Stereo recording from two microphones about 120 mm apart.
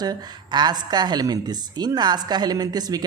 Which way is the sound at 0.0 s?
35° right (ahead or behind).